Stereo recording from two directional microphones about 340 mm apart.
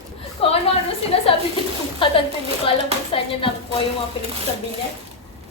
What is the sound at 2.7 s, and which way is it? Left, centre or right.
Speech, centre.